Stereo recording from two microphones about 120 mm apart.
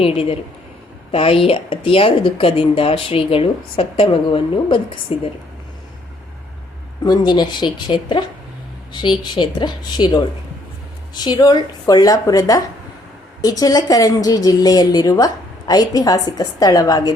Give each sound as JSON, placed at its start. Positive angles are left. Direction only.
{"t": 0.0, "sound": "speech", "side_deg": 50}
{"t": 7.0, "sound": "a woman's voice", "side_deg": 35}